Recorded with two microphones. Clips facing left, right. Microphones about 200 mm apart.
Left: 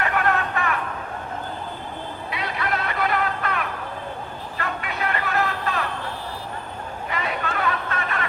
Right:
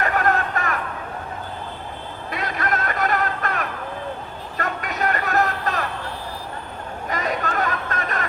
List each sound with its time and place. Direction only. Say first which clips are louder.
0.0 s a sound: right 2 dB; 40° right (ahead or behind)
2.3 s music: right 2 dB; 45° right (ahead or behind)
4.5 s vehicle: right 3 dB; 40° right (ahead or behind)
7.1 s chatter: right 3 dB; 40° right (ahead or behind)